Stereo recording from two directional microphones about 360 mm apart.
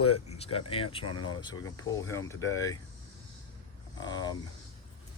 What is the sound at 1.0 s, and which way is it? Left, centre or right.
Speech, left.